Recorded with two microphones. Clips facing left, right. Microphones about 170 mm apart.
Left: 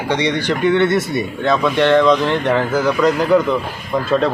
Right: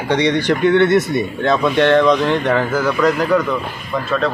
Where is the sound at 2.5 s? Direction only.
15° left (ahead or behind).